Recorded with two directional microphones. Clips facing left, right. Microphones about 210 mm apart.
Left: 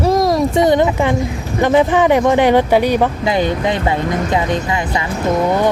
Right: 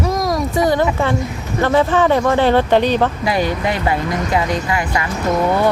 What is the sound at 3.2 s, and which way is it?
Speech, 20° left (ahead or behind).